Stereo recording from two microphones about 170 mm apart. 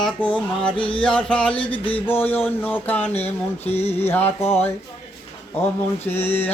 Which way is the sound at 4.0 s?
10° left (ahead or behind).